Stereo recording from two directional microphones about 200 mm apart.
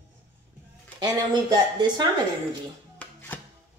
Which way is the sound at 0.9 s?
20° right (ahead or behind).